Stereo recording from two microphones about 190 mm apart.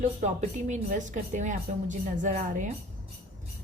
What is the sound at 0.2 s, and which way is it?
A woman's voice, 40° right (ahead or behind).